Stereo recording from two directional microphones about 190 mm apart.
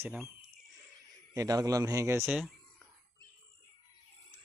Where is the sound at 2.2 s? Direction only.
Centre (ahead or behind).